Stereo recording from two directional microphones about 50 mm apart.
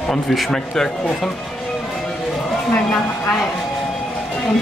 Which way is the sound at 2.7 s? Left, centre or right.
Centre.